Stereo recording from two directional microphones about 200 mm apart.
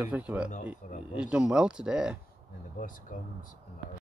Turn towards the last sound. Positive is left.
turn(degrees=40)  # may be behind; listen again after turning